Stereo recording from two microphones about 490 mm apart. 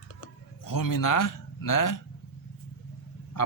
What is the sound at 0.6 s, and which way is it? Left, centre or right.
A man's voice, left.